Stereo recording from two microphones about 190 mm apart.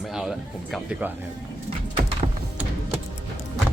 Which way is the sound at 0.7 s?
5° right (ahead or behind).